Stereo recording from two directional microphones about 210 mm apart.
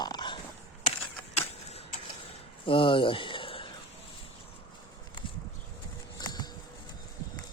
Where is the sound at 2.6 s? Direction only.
25° left (ahead or behind).